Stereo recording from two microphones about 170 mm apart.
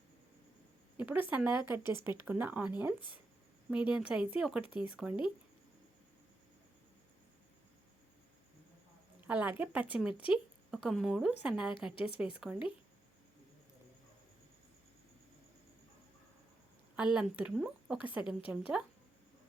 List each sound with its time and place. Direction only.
0.9 s a woman's voice: 10° right (ahead or behind)
4.6 s speech: 30° left (ahead or behind)
4.9 s speech: 5° right (ahead or behind)
9.2 s speech: 10° right (ahead or behind)
10.1 s speech: 30° left (ahead or behind)
10.3 s a woman's voice: centre (ahead or behind)
16.9 s a woman's voice: 5° right (ahead or behind)